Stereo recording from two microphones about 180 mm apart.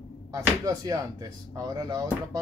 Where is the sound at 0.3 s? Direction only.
20° right (ahead or behind).